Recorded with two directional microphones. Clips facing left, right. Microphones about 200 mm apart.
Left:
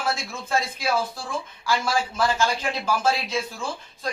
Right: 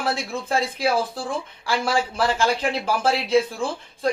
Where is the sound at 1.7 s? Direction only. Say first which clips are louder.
Right 2 dB; 30° right (ahead or behind).